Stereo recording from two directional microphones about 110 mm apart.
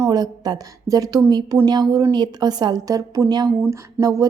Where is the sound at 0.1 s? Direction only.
35° right (ahead or behind).